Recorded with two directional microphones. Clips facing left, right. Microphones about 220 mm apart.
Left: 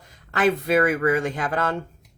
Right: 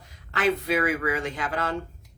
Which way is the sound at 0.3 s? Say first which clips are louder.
Left 4 dB; 50° left (ahead or behind).